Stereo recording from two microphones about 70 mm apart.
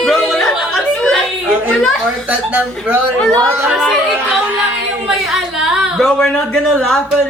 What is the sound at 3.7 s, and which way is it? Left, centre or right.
Chatter, centre.